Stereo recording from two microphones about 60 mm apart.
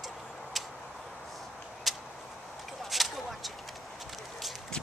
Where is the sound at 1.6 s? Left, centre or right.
Centre.